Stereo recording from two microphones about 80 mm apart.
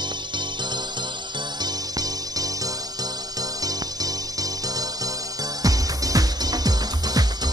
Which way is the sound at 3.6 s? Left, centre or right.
Right.